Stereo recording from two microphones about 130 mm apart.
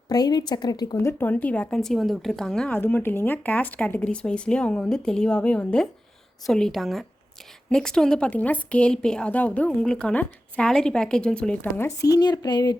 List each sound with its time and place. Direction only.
0.1 s a woman's voice: 30° left (ahead or behind)
0.9 s a woman's voice: 15° left (ahead or behind)
11.9 s a woman's voice: 25° left (ahead or behind)